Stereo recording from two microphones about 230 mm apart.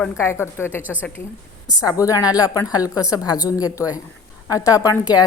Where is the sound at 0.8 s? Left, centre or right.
Centre.